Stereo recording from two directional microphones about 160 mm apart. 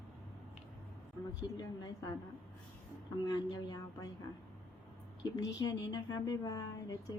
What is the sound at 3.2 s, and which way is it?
Speech, 20° left (ahead or behind).